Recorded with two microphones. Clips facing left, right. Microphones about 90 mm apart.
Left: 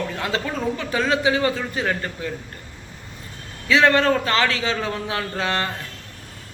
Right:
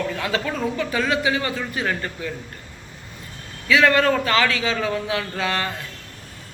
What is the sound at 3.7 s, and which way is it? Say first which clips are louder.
A man's voice: even; 30° left (ahead or behind).